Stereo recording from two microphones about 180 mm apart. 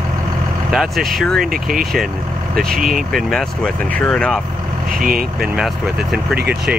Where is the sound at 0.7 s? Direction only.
Centre (ahead or behind).